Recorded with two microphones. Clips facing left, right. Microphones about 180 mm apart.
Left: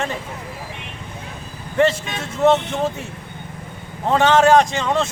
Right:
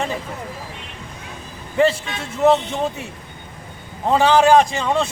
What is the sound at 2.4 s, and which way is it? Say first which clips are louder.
Speech: even; centre (ahead or behind).